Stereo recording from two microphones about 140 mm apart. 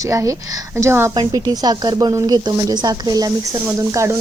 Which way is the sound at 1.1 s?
30° right (ahead or behind).